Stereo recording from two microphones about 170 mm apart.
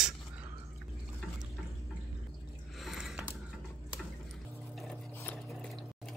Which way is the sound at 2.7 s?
Centre (ahead or behind).